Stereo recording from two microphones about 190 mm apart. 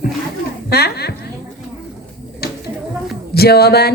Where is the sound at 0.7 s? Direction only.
55° left (ahead or behind).